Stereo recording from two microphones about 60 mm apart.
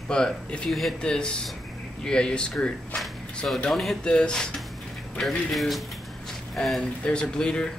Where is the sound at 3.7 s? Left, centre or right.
Centre.